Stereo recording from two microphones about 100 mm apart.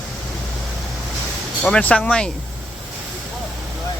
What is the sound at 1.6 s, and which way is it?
Speech, 10° left (ahead or behind).